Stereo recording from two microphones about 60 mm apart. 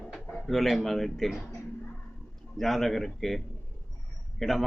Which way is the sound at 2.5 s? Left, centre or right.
Centre.